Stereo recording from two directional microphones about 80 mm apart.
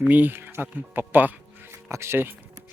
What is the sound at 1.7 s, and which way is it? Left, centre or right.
Speech, right.